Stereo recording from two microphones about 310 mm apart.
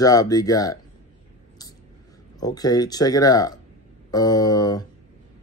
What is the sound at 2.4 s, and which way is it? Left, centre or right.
Speech, centre.